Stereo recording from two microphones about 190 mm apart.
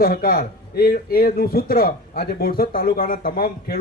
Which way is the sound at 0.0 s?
50° left (ahead or behind).